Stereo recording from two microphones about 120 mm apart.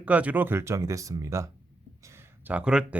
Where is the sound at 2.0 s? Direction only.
20° right (ahead or behind).